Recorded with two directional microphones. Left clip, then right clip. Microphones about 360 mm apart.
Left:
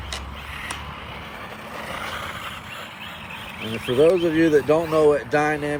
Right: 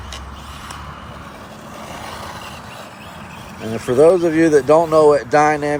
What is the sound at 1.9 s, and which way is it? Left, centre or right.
Vehicle, centre.